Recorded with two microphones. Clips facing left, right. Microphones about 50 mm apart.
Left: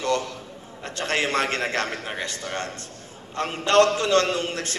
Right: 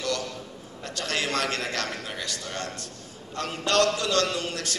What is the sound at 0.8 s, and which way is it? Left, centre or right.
A man's voice, left.